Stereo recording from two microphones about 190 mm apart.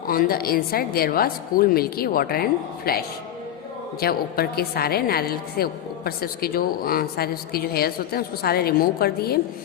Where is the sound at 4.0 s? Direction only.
55° left (ahead or behind).